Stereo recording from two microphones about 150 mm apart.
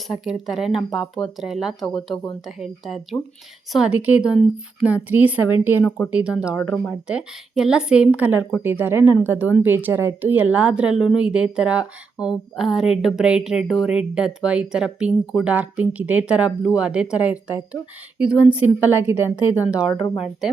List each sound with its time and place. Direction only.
0.1 s a woman's voice: centre (ahead or behind)
12.2 s speech: 25° left (ahead or behind)
12.5 s a woman's voice: 5° right (ahead or behind)
20.1 s speech: centre (ahead or behind)